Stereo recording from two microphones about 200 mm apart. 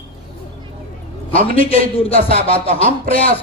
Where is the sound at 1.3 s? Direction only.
30° left (ahead or behind).